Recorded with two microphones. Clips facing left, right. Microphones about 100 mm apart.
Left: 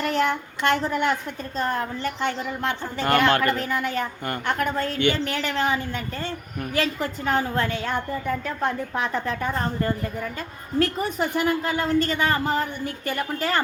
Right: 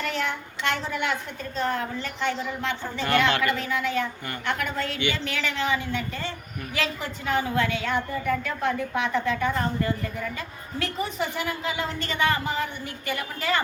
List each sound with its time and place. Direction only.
0.0 s a woman's voice: 45° left (ahead or behind)